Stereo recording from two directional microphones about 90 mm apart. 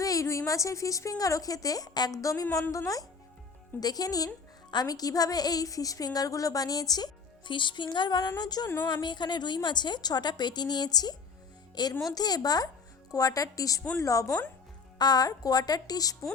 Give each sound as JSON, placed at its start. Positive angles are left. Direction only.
{"t": 0.0, "sound": "a woman's voice", "side_deg": 40}
{"t": 14.9, "sound": "a woman's voice", "side_deg": 50}